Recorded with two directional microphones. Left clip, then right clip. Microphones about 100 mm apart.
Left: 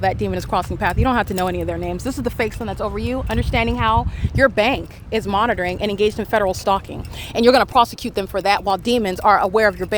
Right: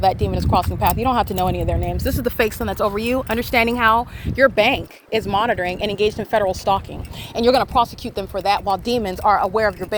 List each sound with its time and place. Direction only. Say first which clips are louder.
0.0 s speech: right 2 dB; 15° left (ahead or behind)
0.3 s speech: right 2 dB; 25° left (ahead or behind)
2.0 s speech: right 4 dB; 5° left (ahead or behind)
2.4 s speech: right 5 dB; 25° right (ahead or behind)
4.4 s speech: right 1 dB; 15° left (ahead or behind)
6.1 s speech: right 1 dB; 35° left (ahead or behind)
7.4 s speech: left 2 dB; 90° left